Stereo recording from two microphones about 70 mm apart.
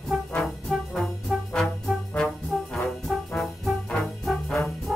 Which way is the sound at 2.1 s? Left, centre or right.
Centre.